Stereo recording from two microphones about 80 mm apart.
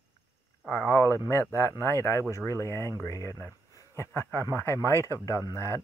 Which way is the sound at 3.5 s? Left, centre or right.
Left.